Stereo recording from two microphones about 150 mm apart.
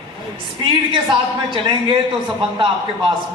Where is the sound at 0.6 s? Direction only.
35° right (ahead or behind).